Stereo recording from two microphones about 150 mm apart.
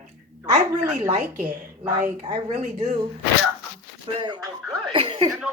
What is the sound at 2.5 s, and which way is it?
Speech, 55° right (ahead or behind).